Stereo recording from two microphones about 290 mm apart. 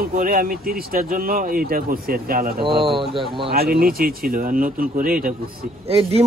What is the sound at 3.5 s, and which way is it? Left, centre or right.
Speech, right.